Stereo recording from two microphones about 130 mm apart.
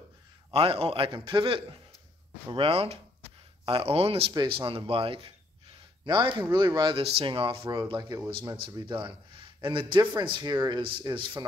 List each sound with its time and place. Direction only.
0.5 s a man's voice: 50° right (ahead or behind)
4.3 s a man's voice: 40° right (ahead or behind)